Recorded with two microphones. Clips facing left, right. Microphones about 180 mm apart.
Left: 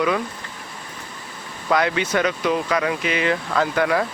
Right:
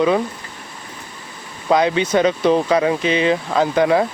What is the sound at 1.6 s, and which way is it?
Speech, 20° right (ahead or behind).